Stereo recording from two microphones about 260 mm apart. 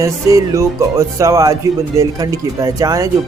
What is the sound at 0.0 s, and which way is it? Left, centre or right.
Speech, centre.